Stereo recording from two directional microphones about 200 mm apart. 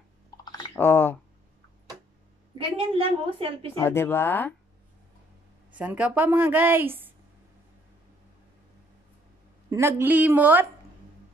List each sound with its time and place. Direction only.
0.5 s typing: 15° left (ahead or behind)
2.8 s a woman's voice: 25° right (ahead or behind)
3.7 s speech: 10° left (ahead or behind)
5.7 s a woman's voice: 5° right (ahead or behind)
9.7 s a woman's voice: 10° right (ahead or behind)